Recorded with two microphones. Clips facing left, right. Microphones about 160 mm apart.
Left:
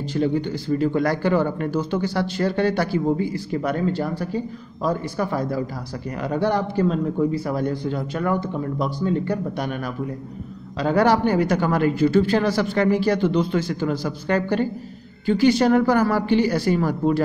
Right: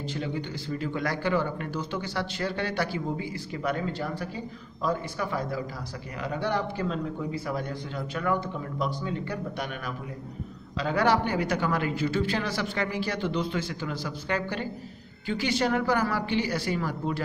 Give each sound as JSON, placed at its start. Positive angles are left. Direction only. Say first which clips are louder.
{"t": 0.0, "sound": "a man's voice", "louder": "left 10 dB", "side_deg": 40}